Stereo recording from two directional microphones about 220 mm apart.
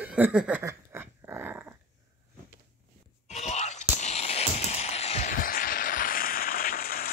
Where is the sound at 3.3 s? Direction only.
30° left (ahead or behind).